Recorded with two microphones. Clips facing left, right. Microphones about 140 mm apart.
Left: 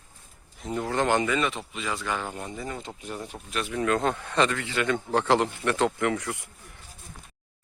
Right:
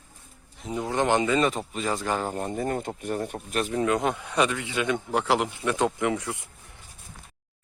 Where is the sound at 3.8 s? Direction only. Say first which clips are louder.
Left 1 dB; 15° right (ahead or behind).